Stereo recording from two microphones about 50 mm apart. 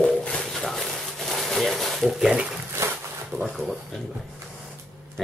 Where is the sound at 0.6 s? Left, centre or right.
Centre.